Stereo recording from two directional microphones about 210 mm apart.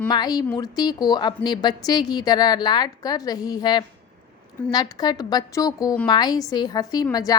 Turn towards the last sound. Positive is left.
turn(degrees=15)  # may be behind; listen again after turning